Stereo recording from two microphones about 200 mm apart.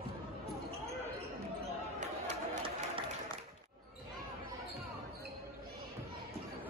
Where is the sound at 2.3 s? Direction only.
25° right (ahead or behind).